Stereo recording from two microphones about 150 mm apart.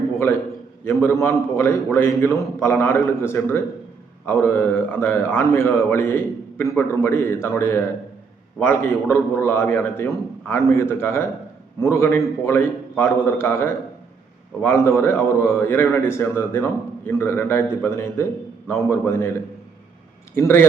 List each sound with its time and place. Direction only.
1.0 s a man's voice: 15° left (ahead or behind)
20.3 s a man's voice: 15° left (ahead or behind)